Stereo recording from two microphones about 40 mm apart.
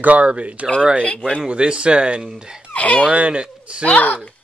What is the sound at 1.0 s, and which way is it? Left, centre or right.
Speech, left.